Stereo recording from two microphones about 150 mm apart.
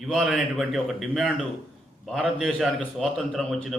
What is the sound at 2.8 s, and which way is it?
Speech, 5° left (ahead or behind).